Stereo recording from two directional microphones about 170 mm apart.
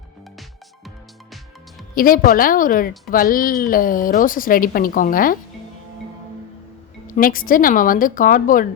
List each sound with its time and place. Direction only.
2.0 s a woman's voice: 55° left (ahead or behind)
7.1 s speech: 55° left (ahead or behind)